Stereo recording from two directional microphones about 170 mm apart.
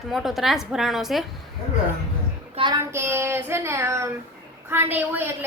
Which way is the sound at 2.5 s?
30° right (ahead or behind).